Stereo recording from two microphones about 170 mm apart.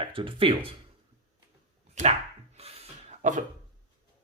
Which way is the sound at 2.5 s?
35° right (ahead or behind).